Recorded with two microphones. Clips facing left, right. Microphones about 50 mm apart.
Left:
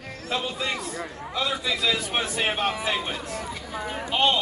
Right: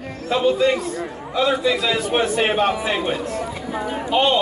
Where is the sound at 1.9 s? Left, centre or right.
Right.